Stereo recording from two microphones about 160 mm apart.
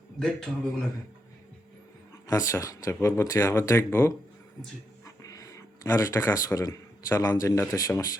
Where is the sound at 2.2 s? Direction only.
20° left (ahead or behind).